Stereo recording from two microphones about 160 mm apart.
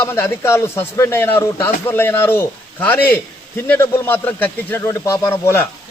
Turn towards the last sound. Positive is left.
turn(degrees=15)  # may be behind; listen again after turning